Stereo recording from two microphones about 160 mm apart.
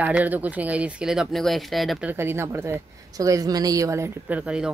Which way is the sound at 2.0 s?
15° right (ahead or behind).